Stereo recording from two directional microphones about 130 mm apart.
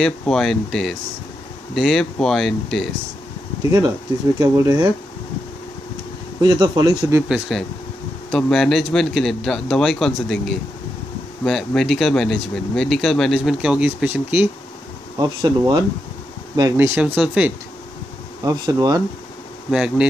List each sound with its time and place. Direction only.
0.0 s speech: 5° left (ahead or behind)
4.4 s speech: 20° right (ahead or behind)
6.4 s speech: 30° right (ahead or behind)
7.2 s speech: 5° right (ahead or behind)
15.1 s speech: 30° right (ahead or behind)
16.7 s speech: 15° right (ahead or behind)
18.4 s speech: 30° right (ahead or behind)
19.7 s speech: 5° right (ahead or behind)